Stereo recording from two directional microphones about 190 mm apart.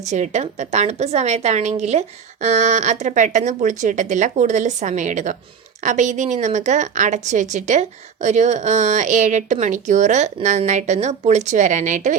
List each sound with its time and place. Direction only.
0.0 s a woman's voice: 35° right (ahead or behind)